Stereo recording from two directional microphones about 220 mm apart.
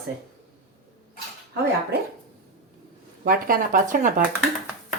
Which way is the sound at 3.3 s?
40° right (ahead or behind).